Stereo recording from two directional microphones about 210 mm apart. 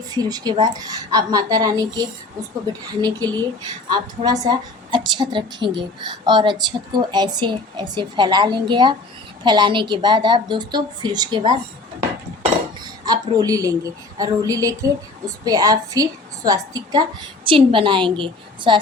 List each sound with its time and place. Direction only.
0.1 s a woman's voice: 20° right (ahead or behind)
12.8 s a woman's voice: 20° right (ahead or behind)